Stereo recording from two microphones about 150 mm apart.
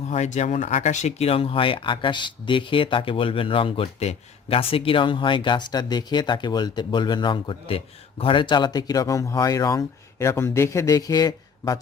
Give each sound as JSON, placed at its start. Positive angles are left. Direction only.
{"t": 0.1, "sound": "speech", "side_deg": 50}